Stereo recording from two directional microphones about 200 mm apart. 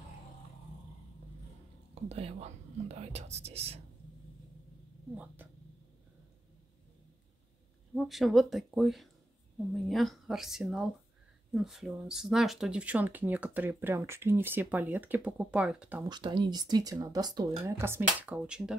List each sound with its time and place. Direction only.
2.0 s speech: 30° right (ahead or behind)
5.1 s speech: 10° right (ahead or behind)
7.9 s speech: centre (ahead or behind)
16.0 s speech: 20° right (ahead or behind); by 18.8 s 5° right (ahead or behind)